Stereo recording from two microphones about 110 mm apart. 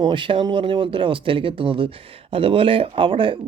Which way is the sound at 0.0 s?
50° right (ahead or behind).